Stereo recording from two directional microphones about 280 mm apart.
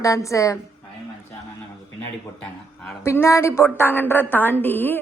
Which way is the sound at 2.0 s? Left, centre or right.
Centre.